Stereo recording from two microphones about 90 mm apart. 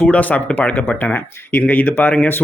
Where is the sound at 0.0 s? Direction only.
15° left (ahead or behind).